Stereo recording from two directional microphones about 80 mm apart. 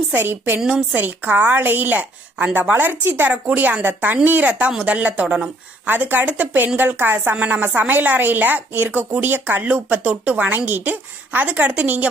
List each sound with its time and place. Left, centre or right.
0.1 s a woman's voice: right
0.6 s a woman's voice: centre